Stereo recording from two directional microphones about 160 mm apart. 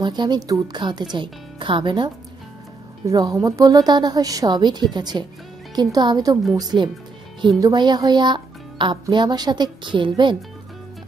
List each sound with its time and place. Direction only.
0.0 s a child's voice: 25° right (ahead or behind)
3.1 s a child's voice: 20° right (ahead or behind)